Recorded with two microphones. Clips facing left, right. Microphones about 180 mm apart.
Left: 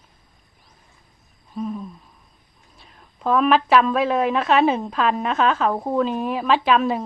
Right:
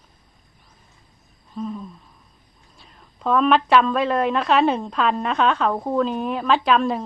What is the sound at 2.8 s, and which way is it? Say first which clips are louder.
A woman's voice: even; centre (ahead or behind).